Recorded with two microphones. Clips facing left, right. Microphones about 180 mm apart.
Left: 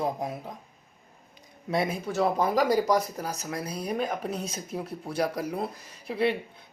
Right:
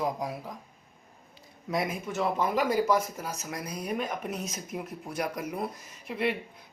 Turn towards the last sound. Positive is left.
turn(degrees=35)  # may be behind; listen again after turning